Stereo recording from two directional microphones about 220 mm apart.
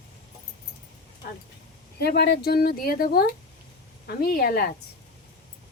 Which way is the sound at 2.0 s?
45° left (ahead or behind).